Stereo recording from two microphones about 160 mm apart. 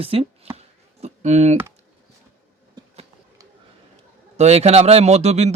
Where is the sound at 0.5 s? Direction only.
45° right (ahead or behind).